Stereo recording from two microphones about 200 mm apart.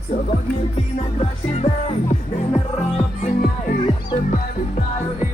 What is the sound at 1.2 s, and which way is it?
Speech, 30° left (ahead or behind).